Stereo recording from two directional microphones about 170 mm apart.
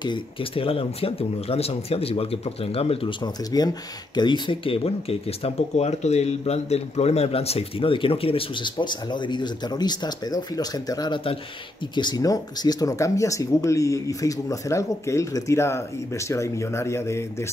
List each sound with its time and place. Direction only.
0.0 s speech: 30° left (ahead or behind)